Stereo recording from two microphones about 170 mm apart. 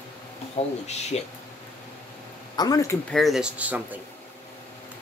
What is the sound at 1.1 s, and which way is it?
Speech, 40° left (ahead or behind).